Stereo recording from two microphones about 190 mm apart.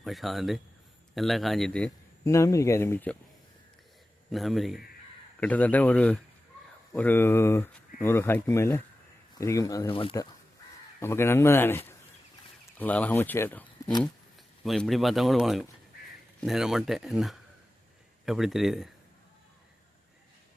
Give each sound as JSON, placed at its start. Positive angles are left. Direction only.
{"t": 0.0, "sound": "a man's voice", "side_deg": 0}
{"t": 4.3, "sound": "a man's voice", "side_deg": 0}
{"t": 9.9, "sound": "speech", "side_deg": 30}
{"t": 11.0, "sound": "a man's voice", "side_deg": 15}